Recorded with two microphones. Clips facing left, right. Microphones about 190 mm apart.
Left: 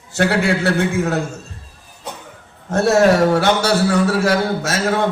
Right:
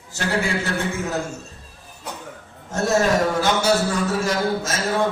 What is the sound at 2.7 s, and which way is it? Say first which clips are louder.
A man's voice: left 6 dB; 65° left (ahead or behind).